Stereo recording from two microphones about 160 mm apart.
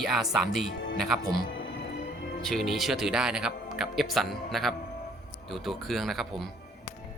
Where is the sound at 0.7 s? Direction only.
90° left.